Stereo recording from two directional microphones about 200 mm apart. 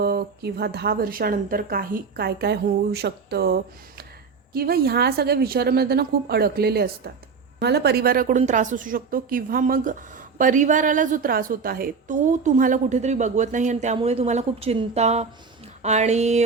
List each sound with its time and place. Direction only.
0.0 s a woman's voice: 50° right (ahead or behind); by 16.4 s 35° right (ahead or behind)